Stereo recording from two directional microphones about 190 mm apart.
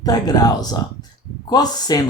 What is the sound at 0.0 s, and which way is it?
Speech, 20° left (ahead or behind).